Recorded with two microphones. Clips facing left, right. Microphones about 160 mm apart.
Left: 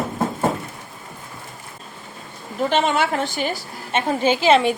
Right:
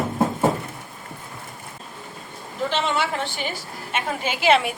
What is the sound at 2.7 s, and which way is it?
Speech, 50° left (ahead or behind).